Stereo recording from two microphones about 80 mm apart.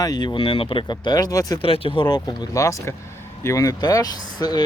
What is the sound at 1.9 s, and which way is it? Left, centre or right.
Speech, left.